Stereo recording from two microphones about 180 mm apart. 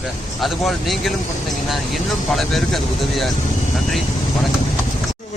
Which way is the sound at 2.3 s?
Centre (ahead or behind).